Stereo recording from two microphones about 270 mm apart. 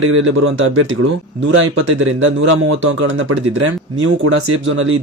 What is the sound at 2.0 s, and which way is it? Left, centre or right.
Speech, right.